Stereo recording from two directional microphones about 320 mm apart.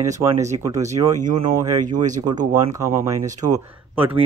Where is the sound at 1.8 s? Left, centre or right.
Right.